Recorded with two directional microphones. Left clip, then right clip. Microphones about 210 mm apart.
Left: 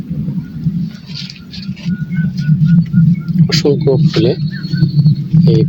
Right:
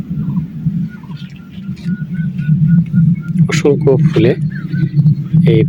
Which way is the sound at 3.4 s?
10° right (ahead or behind).